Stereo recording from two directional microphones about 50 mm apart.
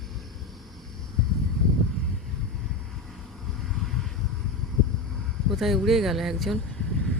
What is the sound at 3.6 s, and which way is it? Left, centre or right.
Vehicle, centre.